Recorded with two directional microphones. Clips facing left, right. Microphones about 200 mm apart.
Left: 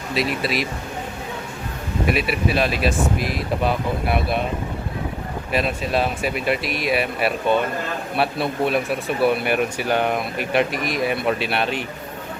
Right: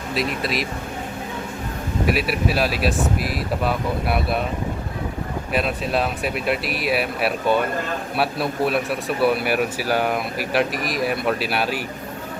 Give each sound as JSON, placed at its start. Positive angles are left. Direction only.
{"t": 0.1, "sound": "speech", "side_deg": 0}
{"t": 2.0, "sound": "speech", "side_deg": 0}
{"t": 5.5, "sound": "speech", "side_deg": 0}